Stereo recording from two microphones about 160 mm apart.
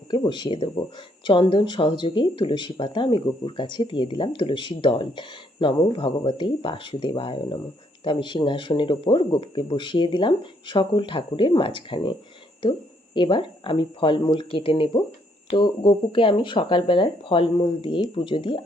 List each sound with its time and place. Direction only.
0.1 s speech: 30° left (ahead or behind)